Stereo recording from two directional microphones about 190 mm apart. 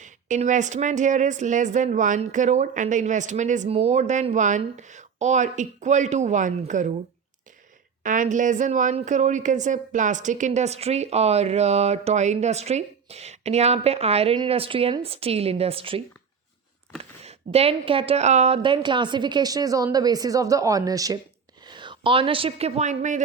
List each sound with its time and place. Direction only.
0.0 s speech: 40° right (ahead or behind)
8.0 s a woman's voice: 45° right (ahead or behind)